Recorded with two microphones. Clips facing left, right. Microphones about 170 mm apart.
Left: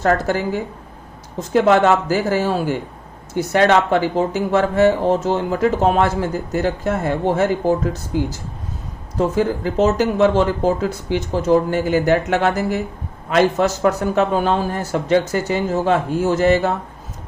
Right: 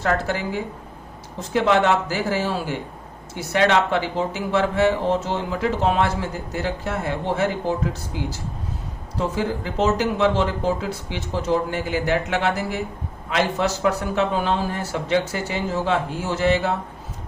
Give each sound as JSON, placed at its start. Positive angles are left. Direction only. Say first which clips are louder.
{"t": 0.0, "sound": "speech", "louder": "left 5 dB", "side_deg": 45}